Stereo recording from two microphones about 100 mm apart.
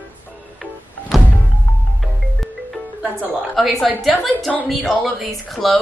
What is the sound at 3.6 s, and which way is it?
A woman's voice, centre (ahead or behind).